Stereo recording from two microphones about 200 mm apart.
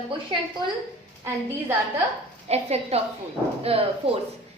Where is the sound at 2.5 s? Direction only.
30° right (ahead or behind).